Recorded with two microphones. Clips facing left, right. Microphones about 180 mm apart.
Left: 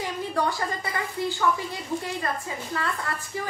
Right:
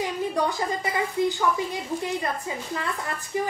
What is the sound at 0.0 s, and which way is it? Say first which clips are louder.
A woman's voice: right 2 dB; 15° right (ahead or behind).